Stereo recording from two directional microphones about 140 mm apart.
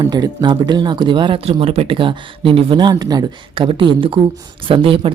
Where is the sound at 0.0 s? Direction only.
30° right (ahead or behind).